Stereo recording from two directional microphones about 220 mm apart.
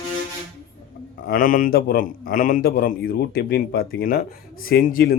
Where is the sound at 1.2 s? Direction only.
40° left (ahead or behind).